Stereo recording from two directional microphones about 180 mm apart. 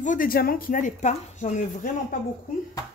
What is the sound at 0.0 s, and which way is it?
Speech, 50° left (ahead or behind).